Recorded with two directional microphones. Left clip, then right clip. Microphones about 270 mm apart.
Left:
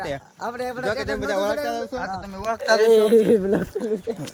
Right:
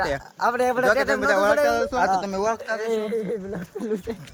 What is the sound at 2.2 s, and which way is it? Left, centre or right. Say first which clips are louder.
Speech: right 6 dB; right.